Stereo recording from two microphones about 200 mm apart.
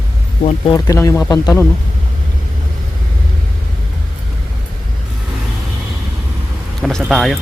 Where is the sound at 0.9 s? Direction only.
15° left (ahead or behind).